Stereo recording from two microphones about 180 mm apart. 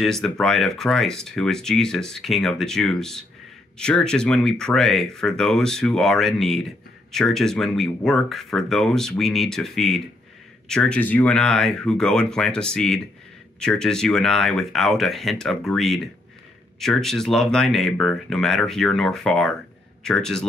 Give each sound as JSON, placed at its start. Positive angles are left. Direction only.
{"t": 0.0, "sound": "speech", "side_deg": 0}